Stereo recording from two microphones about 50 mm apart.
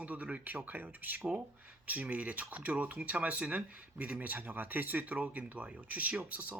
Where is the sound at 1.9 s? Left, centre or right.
Right.